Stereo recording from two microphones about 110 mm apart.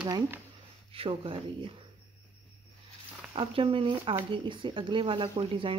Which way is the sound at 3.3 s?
55° right (ahead or behind).